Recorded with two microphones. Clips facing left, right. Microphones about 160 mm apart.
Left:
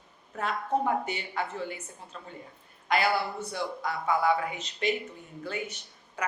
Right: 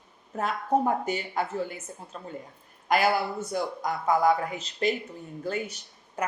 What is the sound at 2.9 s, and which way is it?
A woman's voice, 45° right (ahead or behind).